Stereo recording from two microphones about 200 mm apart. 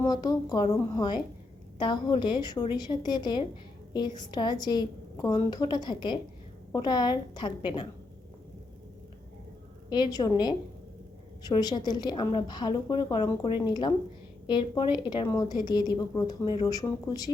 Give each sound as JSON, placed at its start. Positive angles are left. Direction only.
{"t": 0.0, "sound": "a woman's voice", "side_deg": 20}
{"t": 9.9, "sound": "a woman's voice", "side_deg": 20}